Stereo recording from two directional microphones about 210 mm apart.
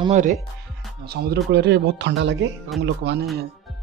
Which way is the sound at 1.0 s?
50° right (ahead or behind).